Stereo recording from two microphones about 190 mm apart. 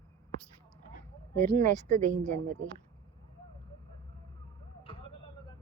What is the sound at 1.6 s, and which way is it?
Speech, 40° right (ahead or behind).